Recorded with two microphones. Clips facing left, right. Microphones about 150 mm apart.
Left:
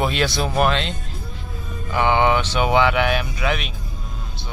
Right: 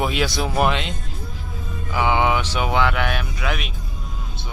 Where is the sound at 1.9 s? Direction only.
5° right (ahead or behind).